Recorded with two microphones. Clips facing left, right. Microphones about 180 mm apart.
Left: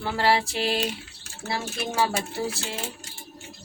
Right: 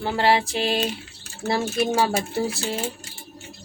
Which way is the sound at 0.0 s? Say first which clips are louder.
Right 3 dB; 20° right (ahead or behind).